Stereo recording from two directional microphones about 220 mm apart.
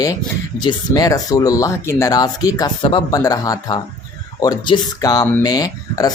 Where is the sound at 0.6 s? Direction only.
15° left (ahead or behind).